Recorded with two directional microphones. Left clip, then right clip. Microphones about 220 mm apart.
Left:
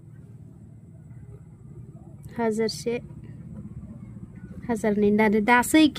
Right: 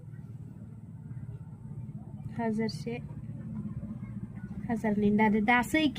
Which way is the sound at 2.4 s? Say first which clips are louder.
Left 8 dB; 45° left (ahead or behind).